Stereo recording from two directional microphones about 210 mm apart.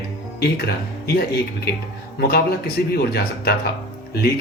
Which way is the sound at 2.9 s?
50° left (ahead or behind).